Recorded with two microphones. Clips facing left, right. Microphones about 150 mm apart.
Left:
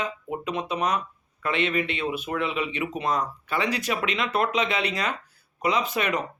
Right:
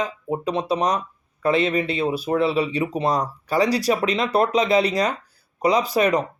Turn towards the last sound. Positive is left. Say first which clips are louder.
# right 7 dB
turn(degrees=-35)  # may be behind; listen again after turning